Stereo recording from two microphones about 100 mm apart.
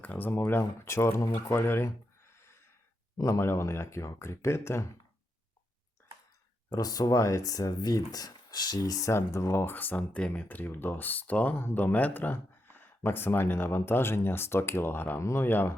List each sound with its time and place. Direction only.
0.0 s speech: 15° left (ahead or behind)
3.2 s speech: 30° left (ahead or behind)
6.7 s speech: 40° left (ahead or behind); by 15.7 s 20° left (ahead or behind)